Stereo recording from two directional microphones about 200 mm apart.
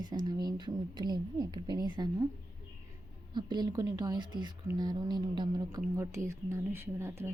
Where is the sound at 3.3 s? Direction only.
20° right (ahead or behind).